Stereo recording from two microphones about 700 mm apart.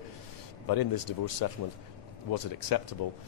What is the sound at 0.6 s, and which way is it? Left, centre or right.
Speech, left.